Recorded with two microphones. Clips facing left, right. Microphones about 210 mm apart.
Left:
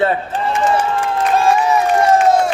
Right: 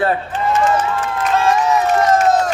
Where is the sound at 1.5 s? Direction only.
10° left (ahead or behind).